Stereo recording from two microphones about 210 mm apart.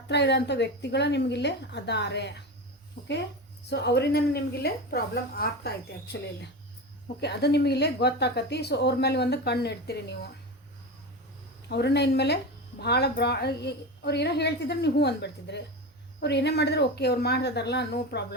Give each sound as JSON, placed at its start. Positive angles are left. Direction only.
{"t": 0.1, "sound": "speech", "side_deg": 55}
{"t": 3.0, "sound": "speech", "side_deg": 40}
{"t": 3.7, "sound": "speech", "side_deg": 55}
{"t": 7.2, "sound": "speech", "side_deg": 50}
{"t": 11.7, "sound": "speech", "side_deg": 55}